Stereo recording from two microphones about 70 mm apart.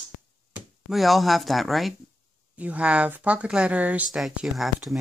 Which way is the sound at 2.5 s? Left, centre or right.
Centre.